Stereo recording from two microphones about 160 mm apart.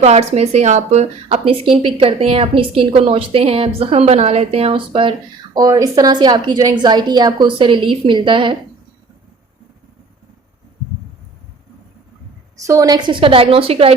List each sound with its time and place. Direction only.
0.0 s speech: 40° right (ahead or behind)
1.5 s a woman's voice: 35° right (ahead or behind)
5.5 s a woman's voice: 20° right (ahead or behind)
12.5 s a woman's voice: 20° right (ahead or behind); by 13.9 s 35° right (ahead or behind)